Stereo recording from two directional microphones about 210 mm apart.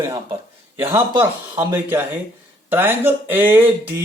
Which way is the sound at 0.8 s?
15° right (ahead or behind).